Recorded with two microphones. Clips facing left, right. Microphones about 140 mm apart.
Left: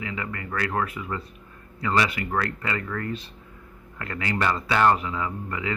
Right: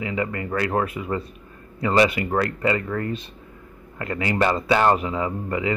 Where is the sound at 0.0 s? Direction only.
25° right (ahead or behind).